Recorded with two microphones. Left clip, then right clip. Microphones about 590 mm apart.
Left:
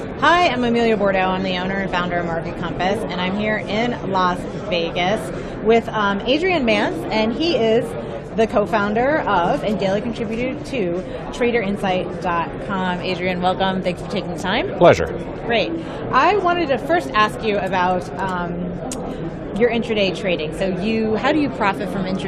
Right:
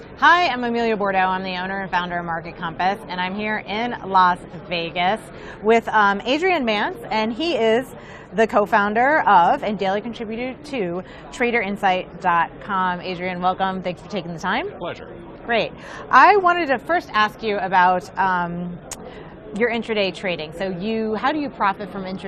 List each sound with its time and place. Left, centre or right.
0.2 s a woman's voice: right
14.8 s speech: left
15.4 s a man's voice: right
19.5 s a woman's voice: right